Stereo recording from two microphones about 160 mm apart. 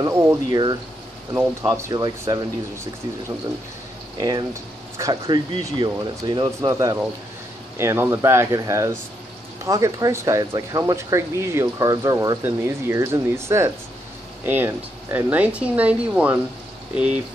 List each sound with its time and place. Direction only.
0.0 s speech: 15° right (ahead or behind)
1.3 s speech: 10° right (ahead or behind)
1.7 s speech: 20° right (ahead or behind)
4.2 s speech: 25° right (ahead or behind); by 16.3 s 10° right (ahead or behind)